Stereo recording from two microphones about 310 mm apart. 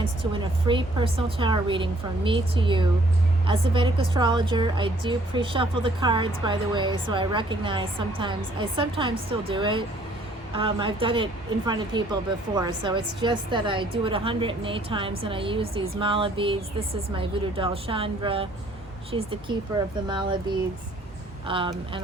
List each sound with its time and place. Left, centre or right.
0.2 s a woman's voice: centre
21.4 s a woman's voice: centre